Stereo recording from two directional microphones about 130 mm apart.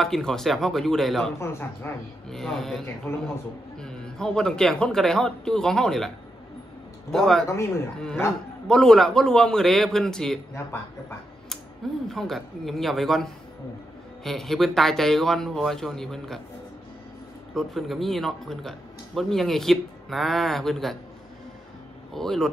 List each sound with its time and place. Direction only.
0.0 s speech: 5° left (ahead or behind)
1.4 s speech: 20° left (ahead or behind)
2.2 s speech: 5° left (ahead or behind)
7.4 s speech: 20° left (ahead or behind)
8.6 s speech: 5° left (ahead or behind)
10.5 s speech: 20° left (ahead or behind)
12.1 s speech: centre (ahead or behind)
17.6 s speech: centre (ahead or behind)
22.1 s speech: 5° left (ahead or behind)